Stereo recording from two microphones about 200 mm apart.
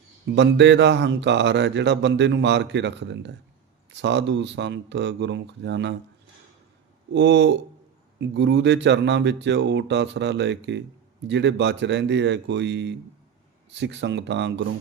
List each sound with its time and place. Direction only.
0.3 s speech: 60° right (ahead or behind)
7.1 s speech: 60° right (ahead or behind)